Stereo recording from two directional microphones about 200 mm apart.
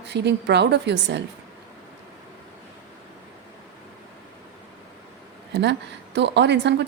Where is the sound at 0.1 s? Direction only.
60° right (ahead or behind).